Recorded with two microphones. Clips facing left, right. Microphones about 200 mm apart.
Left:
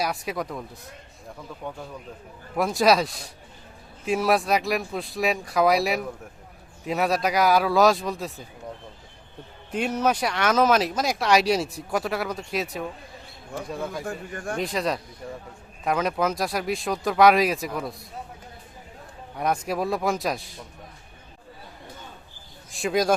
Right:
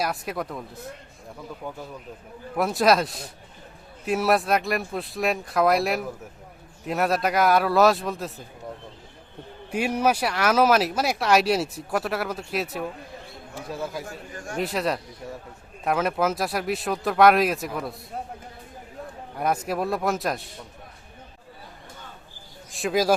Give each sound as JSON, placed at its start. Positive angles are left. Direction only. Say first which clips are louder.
{"t": 0.0, "sound": "speech", "louder": "even", "side_deg": 0}
{"t": 1.6, "sound": "speech", "louder": "left 2 dB", "side_deg": 0}
{"t": 9.7, "sound": "speech", "louder": "right 1 dB", "side_deg": -10}
{"t": 14.0, "sound": "a man's voice", "louder": "left 5 dB", "side_deg": 55}
{"t": 14.6, "sound": "speech", "louder": "right 2 dB", "side_deg": -5}
{"t": 19.4, "sound": "speech", "louder": "even", "side_deg": -5}
{"t": 22.7, "sound": "speech", "louder": "even", "side_deg": 0}